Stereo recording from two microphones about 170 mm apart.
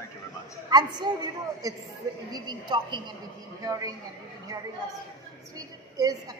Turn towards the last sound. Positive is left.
turn(degrees=-20)  # may be behind; listen again after turning